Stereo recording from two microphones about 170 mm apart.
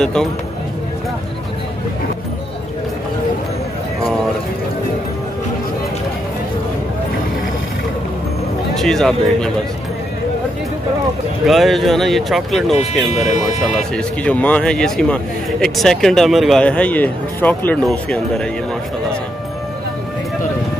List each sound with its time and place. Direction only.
0.0 s speech: 5° left (ahead or behind)
8.7 s speech: centre (ahead or behind)
11.4 s speech: centre (ahead or behind)
13.1 s speech: 40° left (ahead or behind)
13.6 s speech: 5° left (ahead or behind)